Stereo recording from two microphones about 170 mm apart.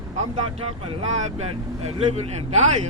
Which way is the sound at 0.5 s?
35° right (ahead or behind).